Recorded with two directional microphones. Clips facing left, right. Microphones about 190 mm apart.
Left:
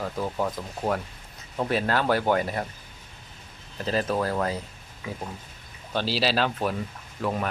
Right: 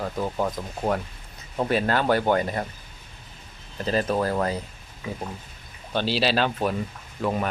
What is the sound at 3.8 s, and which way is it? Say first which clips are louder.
Speech: right 2 dB; centre (ahead or behind).